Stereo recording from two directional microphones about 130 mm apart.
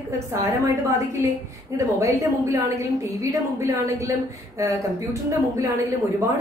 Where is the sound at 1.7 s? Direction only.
25° right (ahead or behind).